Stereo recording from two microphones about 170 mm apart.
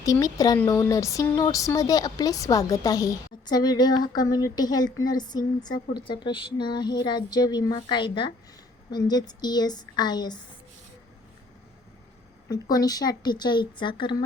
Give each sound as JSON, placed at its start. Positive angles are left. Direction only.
{"t": 0.0, "sound": "speech", "side_deg": 20}
{"t": 12.5, "sound": "speech", "side_deg": 20}